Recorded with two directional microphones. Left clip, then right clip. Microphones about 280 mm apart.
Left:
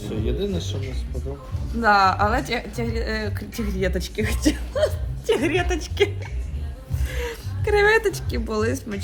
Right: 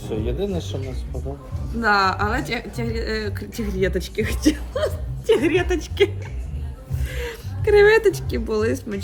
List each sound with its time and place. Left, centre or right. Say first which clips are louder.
0.0 s speech: right 1 dB; centre
1.8 s a woman's voice: left 1 dB; centre
7.1 s speech: left 1 dB; centre